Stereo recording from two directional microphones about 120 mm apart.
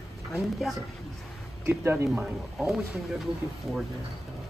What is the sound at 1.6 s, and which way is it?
Speech, 20° right (ahead or behind).